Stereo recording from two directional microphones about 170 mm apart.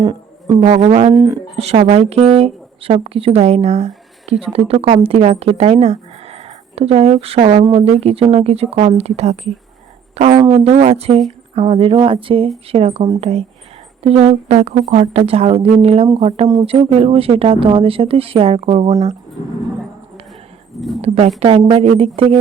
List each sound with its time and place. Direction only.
0.0 s a sound: 25° right (ahead or behind)
0.7 s speech: 40° right (ahead or behind)
21.0 s speech: 40° right (ahead or behind)